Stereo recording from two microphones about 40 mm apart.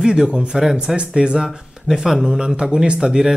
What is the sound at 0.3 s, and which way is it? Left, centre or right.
Speech, right.